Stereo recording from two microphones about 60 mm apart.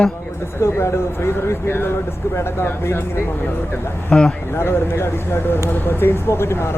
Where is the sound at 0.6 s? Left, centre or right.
Left.